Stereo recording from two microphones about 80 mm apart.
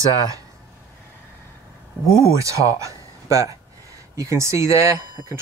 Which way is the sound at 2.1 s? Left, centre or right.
Left.